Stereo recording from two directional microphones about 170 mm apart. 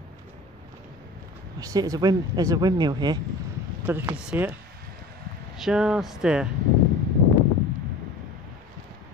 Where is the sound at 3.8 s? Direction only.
10° right (ahead or behind).